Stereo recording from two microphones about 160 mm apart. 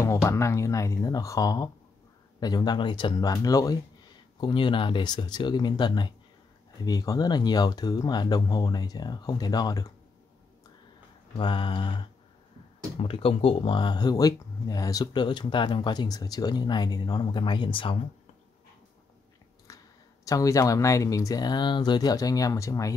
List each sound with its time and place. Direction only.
0.0 s speech: 20° left (ahead or behind)
11.3 s mantra: 30° left (ahead or behind)
13.0 s speech: 35° left (ahead or behind)
19.7 s a sound: 20° left (ahead or behind)
20.2 s speech: 20° left (ahead or behind)